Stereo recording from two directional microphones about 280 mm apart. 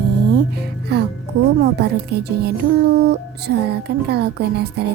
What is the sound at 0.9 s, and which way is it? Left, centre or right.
Music, right.